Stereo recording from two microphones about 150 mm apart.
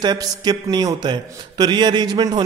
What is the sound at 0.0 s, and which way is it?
A man's voice, 30° right (ahead or behind).